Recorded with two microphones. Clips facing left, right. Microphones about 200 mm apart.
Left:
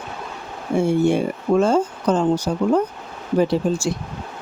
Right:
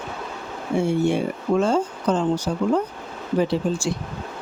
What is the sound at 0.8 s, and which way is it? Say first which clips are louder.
Speech: left 3 dB; 45° left (ahead or behind).